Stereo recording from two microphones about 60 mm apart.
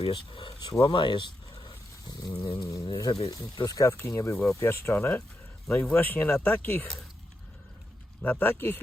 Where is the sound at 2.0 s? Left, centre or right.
Left.